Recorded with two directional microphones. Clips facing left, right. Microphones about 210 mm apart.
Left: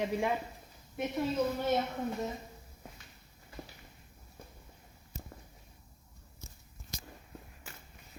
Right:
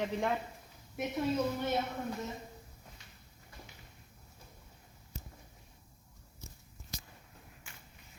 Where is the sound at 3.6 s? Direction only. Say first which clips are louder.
Left 8 dB; 65° left (ahead or behind).